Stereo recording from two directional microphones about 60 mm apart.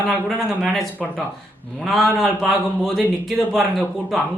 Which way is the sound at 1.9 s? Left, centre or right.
Centre.